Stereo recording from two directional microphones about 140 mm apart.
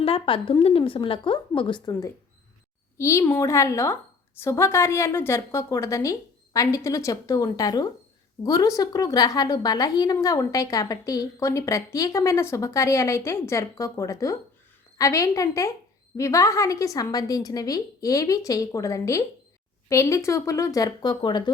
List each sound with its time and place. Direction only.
0.0 s a woman's voice: 40° left (ahead or behind)
1.9 s a woman's voice: 20° left (ahead or behind)